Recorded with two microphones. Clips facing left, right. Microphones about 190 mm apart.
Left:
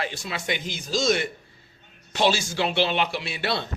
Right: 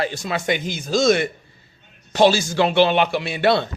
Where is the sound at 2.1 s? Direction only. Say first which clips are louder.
Right 7 dB; 40° right (ahead or behind).